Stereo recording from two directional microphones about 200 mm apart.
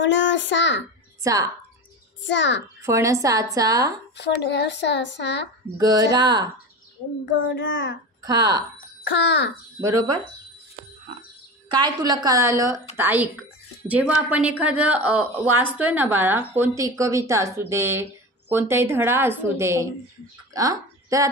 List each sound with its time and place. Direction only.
0.0 s speech: 65° left (ahead or behind)
1.2 s speech: 15° right (ahead or behind)
2.2 s speech: 65° left (ahead or behind)
2.8 s a woman's voice: 15° right (ahead or behind)
4.2 s speech: 60° left (ahead or behind)
5.8 s a woman's voice: 20° right (ahead or behind)
7.3 s a child's voice: 70° left (ahead or behind)
8.2 s speech: 20° right (ahead or behind)
9.0 s speech: 60° left (ahead or behind)
9.8 s a woman's voice: 15° right (ahead or behind)
11.7 s a woman's voice: 20° right (ahead or behind)